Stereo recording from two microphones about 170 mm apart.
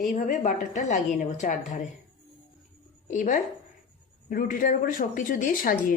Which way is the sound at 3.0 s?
50° left (ahead or behind).